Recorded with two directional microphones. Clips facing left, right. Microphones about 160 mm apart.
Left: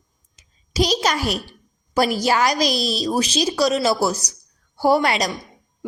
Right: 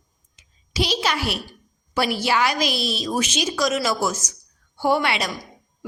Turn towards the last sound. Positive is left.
turn(degrees=40)  # may be behind; listen again after turning